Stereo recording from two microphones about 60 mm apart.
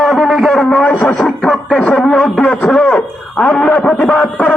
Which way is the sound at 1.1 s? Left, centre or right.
Centre.